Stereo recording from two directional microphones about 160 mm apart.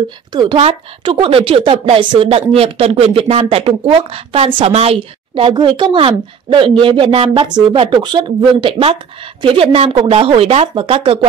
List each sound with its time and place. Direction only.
0.3 s speech: 25° right (ahead or behind)
0.6 s speech: 35° right (ahead or behind)